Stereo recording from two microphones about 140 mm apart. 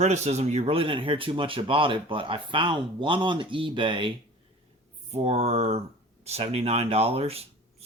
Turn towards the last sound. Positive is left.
turn(degrees=-45)  # may be behind; listen again after turning